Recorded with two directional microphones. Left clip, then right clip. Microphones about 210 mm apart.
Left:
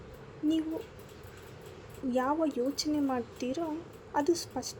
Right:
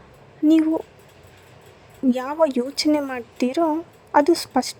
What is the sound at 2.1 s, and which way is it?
Speech, 50° right (ahead or behind).